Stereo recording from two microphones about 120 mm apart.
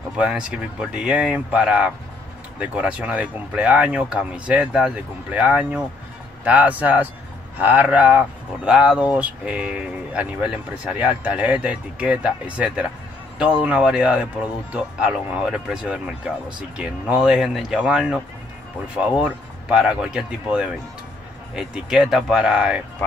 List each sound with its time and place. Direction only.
0.2 s speech: 10° right (ahead or behind)